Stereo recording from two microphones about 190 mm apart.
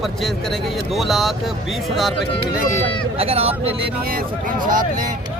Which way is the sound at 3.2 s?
30° right (ahead or behind).